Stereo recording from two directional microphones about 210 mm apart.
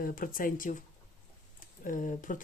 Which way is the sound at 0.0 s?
40° left (ahead or behind).